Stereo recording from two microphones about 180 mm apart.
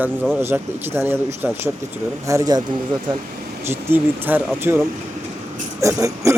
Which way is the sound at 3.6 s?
10° right (ahead or behind).